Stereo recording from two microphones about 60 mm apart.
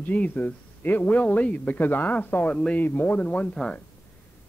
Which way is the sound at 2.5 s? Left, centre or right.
Centre.